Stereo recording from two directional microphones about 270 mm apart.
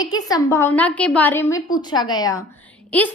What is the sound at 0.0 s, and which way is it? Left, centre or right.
A woman's voice, centre.